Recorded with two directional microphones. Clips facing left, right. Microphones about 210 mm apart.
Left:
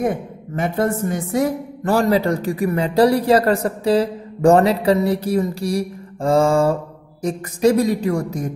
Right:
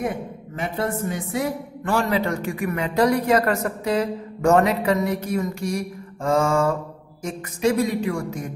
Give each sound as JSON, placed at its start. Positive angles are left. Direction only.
{"t": 0.6, "sound": "a woman's voice", "side_deg": 45}